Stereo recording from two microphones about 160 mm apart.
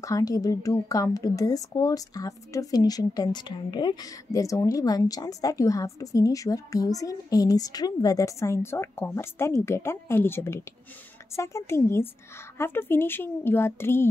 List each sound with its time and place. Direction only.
0.0 s a woman's voice: 20° left (ahead or behind)